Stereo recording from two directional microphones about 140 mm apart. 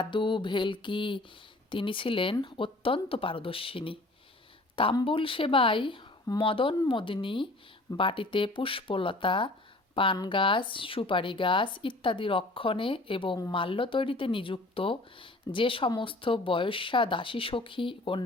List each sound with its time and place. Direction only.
0.0 s speech: 35° left (ahead or behind)